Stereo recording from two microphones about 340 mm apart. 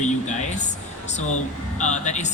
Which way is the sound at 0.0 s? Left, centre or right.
Left.